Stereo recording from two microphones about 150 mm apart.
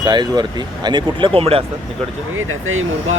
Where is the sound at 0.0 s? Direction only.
30° right (ahead or behind).